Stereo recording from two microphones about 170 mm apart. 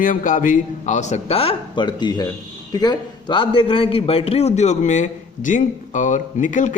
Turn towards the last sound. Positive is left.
turn(degrees=50)  # may be behind; listen again after turning